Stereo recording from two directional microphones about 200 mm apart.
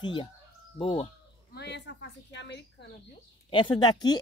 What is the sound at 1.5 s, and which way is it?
Speech, 60° left (ahead or behind).